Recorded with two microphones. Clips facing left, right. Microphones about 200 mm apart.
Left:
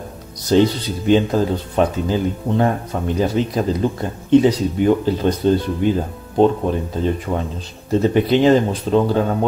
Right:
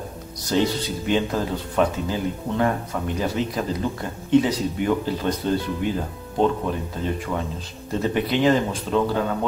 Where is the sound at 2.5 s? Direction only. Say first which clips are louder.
Left 4 dB; 30° left (ahead or behind).